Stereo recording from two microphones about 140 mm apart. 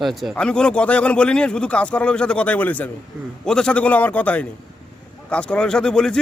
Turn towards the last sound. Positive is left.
turn(degrees=5)  # may be behind; listen again after turning